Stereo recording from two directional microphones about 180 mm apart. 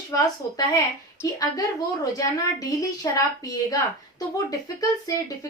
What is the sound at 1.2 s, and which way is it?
A woman's voice, 20° left (ahead or behind).